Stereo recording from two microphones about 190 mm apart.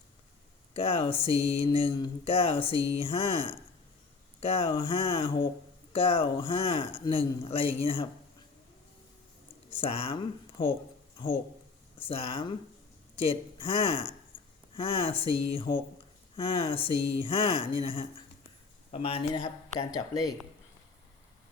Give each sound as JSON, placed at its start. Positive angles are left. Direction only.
{"t": 0.7, "sound": "mantra", "side_deg": 30}
{"t": 9.6, "sound": "speech", "side_deg": 30}
{"t": 12.0, "sound": "mantra", "side_deg": 30}